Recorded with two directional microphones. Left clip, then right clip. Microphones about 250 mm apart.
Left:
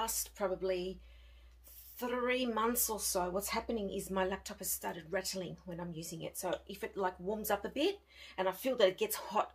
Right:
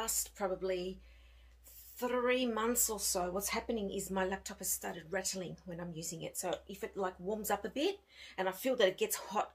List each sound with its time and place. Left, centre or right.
0.0 s speech: centre
2.0 s speech: centre